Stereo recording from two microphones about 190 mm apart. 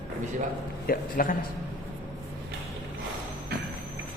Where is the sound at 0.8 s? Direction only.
50° left (ahead or behind).